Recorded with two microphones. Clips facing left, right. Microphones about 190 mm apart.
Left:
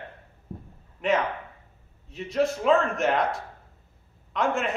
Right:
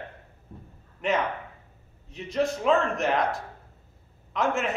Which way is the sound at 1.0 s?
Centre (ahead or behind).